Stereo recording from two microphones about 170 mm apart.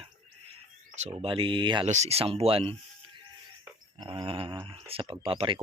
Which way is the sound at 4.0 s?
30° right (ahead or behind).